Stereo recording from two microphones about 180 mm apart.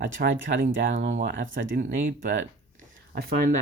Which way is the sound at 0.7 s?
80° right.